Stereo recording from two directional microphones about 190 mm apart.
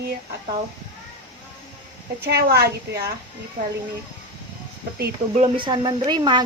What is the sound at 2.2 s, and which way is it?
A woman's voice, 55° right (ahead or behind).